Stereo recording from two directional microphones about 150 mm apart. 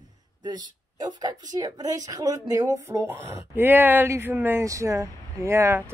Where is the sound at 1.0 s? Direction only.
25° right (ahead or behind).